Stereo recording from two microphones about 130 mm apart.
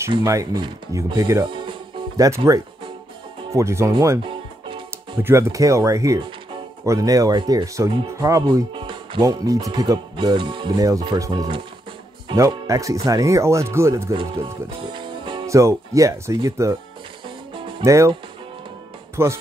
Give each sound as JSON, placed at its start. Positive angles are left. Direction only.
{"t": 0.2, "sound": "speech", "side_deg": -25}
{"t": 1.5, "sound": "music", "side_deg": -40}
{"t": 2.1, "sound": "speech", "side_deg": -25}
{"t": 4.2, "sound": "music", "side_deg": -40}
{"t": 5.2, "sound": "speech", "side_deg": -20}
{"t": 9.2, "sound": "speech", "side_deg": -25}
{"t": 14.1, "sound": "speech", "side_deg": -40}
{"t": 15.4, "sound": "speech", "side_deg": -25}
{"t": 17.8, "sound": "speech", "side_deg": -25}
{"t": 19.2, "sound": "speech", "side_deg": -20}